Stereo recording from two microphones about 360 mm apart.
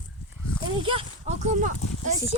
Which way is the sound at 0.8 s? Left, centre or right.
Centre.